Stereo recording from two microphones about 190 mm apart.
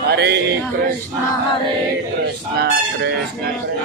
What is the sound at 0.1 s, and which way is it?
Male singing, 60° right (ahead or behind).